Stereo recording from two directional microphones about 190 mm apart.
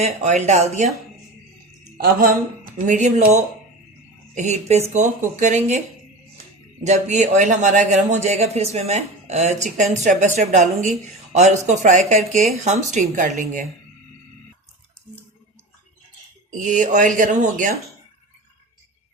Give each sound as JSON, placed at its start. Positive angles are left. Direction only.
{"t": 0.0, "sound": "a man's voice", "side_deg": -35}
{"t": 2.7, "sound": "a man's voice", "side_deg": -40}
{"t": 6.8, "sound": "a man's voice", "side_deg": -40}
{"t": 16.5, "sound": "speech", "side_deg": -45}